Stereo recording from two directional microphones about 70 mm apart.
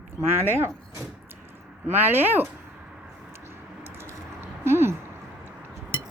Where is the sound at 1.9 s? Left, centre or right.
Right.